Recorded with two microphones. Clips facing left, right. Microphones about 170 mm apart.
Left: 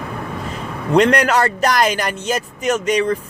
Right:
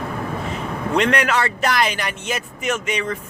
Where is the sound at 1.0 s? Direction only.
40° left (ahead or behind).